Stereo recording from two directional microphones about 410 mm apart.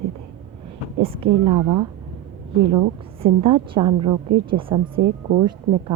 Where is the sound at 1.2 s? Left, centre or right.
Right.